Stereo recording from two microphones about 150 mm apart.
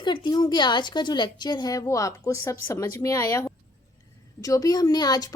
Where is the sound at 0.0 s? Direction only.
30° left (ahead or behind).